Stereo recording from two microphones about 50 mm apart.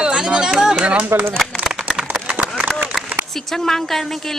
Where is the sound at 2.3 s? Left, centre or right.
Right.